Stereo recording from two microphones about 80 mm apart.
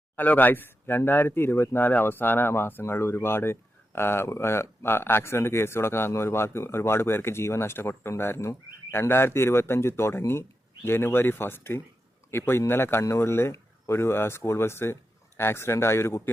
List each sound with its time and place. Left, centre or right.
0.2 s speech: left